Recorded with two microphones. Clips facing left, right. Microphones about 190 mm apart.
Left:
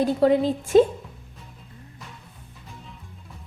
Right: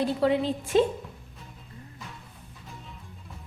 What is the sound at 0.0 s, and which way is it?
Speech, 45° left (ahead or behind).